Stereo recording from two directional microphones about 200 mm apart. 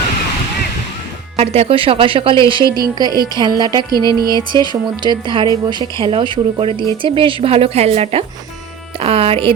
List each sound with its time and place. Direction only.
1.4 s speech: 30° right (ahead or behind)